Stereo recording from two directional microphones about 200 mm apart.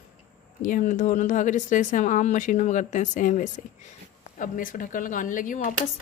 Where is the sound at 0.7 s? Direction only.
40° left (ahead or behind).